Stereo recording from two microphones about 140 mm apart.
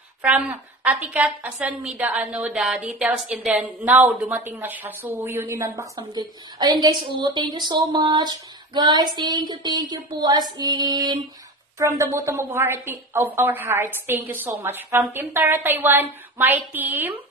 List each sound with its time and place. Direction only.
0.2 s a woman's voice: 10° right (ahead or behind)
5.9 s a woman's voice: 30° right (ahead or behind); by 17.1 s 15° right (ahead or behind)